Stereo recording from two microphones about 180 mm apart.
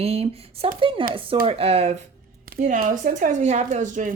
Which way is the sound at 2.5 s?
45° right (ahead or behind).